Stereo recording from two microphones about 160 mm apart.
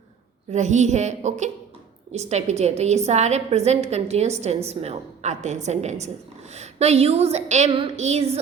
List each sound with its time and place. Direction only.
0.5 s a woman's voice: 50° right (ahead or behind)